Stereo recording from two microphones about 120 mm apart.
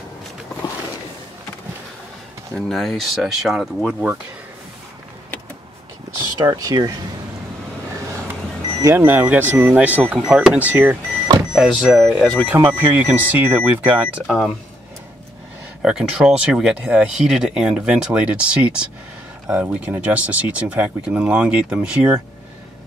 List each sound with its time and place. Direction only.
2.5 s speech: centre (ahead or behind)
6.4 s speech: 30° right (ahead or behind)
8.8 s speech: 15° right (ahead or behind)
11.5 s speech: 5° right (ahead or behind)
12.4 s speech: 20° right (ahead or behind)
15.8 s speech: 5° right (ahead or behind)